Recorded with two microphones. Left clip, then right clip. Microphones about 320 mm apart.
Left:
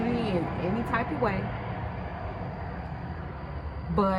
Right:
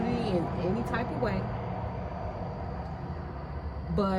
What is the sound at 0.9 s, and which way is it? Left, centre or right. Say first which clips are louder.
Speech: left 3 dB; centre.